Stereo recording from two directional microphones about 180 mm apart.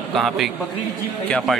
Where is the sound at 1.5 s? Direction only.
Centre (ahead or behind).